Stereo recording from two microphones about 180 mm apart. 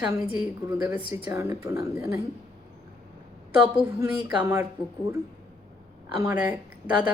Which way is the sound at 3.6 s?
10° right (ahead or behind).